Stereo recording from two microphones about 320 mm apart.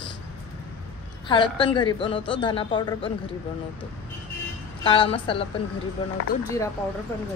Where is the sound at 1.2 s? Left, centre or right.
Centre.